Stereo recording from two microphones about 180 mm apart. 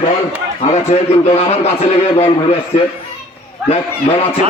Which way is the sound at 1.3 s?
35° left (ahead or behind).